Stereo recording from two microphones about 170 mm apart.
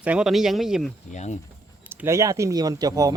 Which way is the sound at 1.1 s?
45° left (ahead or behind).